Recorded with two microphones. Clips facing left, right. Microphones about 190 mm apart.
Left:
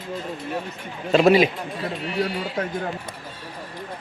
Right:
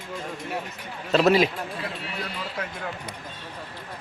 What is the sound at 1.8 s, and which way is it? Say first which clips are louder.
A man's voice: left 8 dB; 30° left (ahead or behind).